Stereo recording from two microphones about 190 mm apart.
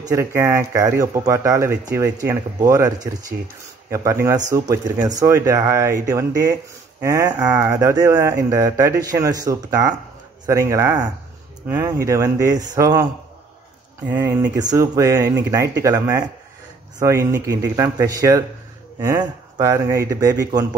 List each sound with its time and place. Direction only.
0.0 s speech: 15° right (ahead or behind)
14.0 s speech: 15° right (ahead or behind)